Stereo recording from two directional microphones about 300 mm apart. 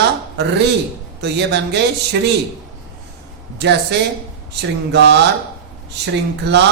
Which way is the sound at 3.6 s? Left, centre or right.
Right.